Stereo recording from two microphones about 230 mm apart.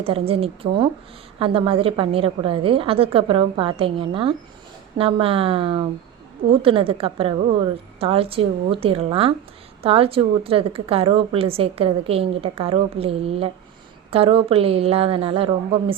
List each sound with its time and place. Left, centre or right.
0.0 s a woman's voice: right